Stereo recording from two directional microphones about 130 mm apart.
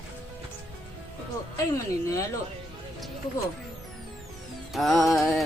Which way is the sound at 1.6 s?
25° left (ahead or behind).